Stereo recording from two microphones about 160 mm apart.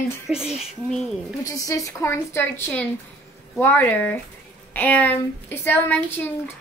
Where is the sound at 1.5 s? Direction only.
20° left (ahead or behind).